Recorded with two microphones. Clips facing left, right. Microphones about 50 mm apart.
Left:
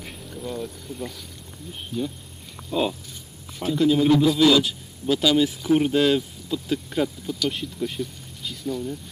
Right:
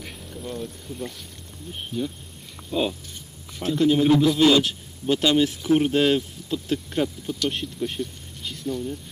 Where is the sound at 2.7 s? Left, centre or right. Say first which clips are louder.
Left 1 dB; centre.